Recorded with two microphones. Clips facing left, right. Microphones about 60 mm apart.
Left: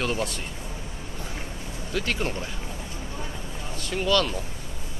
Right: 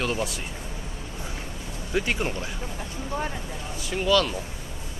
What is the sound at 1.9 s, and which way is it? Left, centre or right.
Speech, centre.